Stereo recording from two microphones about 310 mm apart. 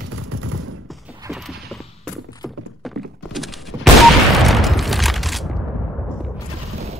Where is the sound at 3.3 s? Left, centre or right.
Centre.